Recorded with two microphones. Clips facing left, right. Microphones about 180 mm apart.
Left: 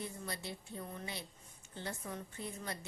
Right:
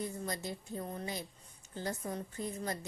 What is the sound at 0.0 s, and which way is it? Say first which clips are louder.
A woman's voice: right 5 dB; 40° right (ahead or behind).